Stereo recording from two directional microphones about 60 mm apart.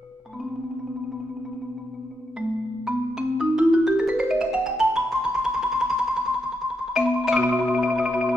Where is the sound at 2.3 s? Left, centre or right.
Centre.